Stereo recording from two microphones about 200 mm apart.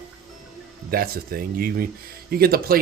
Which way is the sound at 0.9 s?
50° right (ahead or behind).